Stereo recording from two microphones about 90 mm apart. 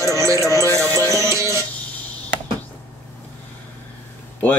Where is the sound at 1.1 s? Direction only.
35° right (ahead or behind).